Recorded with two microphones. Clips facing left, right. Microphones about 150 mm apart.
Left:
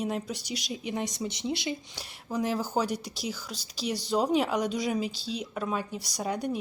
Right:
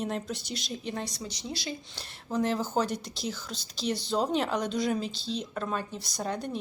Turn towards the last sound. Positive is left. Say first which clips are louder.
# left 2 dB
turn(degrees=10)  # may be behind; listen again after turning